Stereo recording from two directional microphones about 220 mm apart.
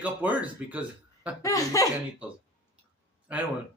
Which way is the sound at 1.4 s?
15° left (ahead or behind).